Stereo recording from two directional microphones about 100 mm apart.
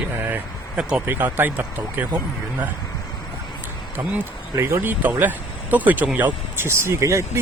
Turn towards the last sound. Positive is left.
turn(degrees=-30)  # may be behind; listen again after turning